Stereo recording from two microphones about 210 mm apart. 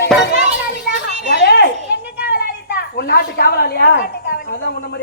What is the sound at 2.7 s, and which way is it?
Speech, 50° left (ahead or behind).